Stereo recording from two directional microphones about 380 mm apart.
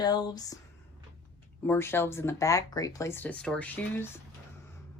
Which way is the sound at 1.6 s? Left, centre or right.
Centre.